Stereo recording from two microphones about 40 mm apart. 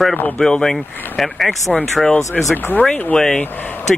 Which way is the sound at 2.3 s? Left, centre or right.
Left.